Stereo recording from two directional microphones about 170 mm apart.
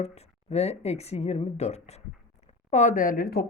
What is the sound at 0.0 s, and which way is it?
Speech, 40° left (ahead or behind).